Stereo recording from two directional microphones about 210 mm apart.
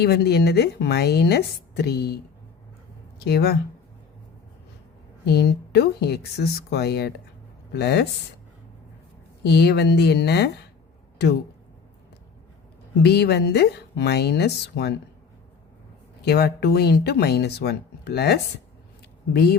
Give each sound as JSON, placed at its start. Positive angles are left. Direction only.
{"t": 0.0, "sound": "speech", "side_deg": 50}
{"t": 3.2, "sound": "speech", "side_deg": 50}
{"t": 5.2, "sound": "speech", "side_deg": 50}
{"t": 9.4, "sound": "speech", "side_deg": 50}
{"t": 13.0, "sound": "speech", "side_deg": 50}
{"t": 16.2, "sound": "speech", "side_deg": 50}